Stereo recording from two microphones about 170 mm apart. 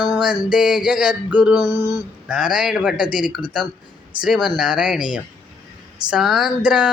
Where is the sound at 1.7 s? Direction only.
25° left (ahead or behind).